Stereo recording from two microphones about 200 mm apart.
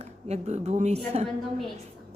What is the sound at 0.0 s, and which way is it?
A woman's voice, 35° right (ahead or behind).